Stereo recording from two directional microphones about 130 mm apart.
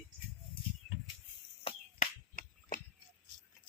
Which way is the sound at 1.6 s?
75° left (ahead or behind).